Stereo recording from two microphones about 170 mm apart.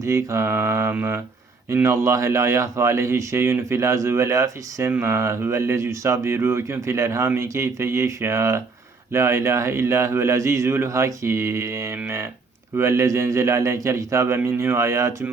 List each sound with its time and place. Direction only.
0.0 s speech: 15° right (ahead or behind)